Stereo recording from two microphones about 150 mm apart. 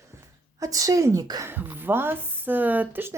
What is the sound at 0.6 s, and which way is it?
Speech, 25° right (ahead or behind).